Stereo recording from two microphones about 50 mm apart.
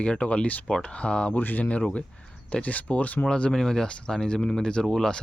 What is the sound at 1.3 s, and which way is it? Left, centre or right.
Speech, left.